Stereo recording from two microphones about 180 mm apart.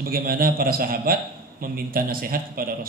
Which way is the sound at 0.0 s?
55° right (ahead or behind).